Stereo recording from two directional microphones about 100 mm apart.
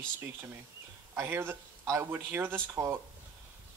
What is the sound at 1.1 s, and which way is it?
Speech, 25° right (ahead or behind).